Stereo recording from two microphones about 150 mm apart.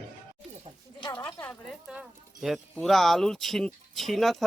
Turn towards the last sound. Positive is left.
turn(degrees=0)  # may be behind; listen again after turning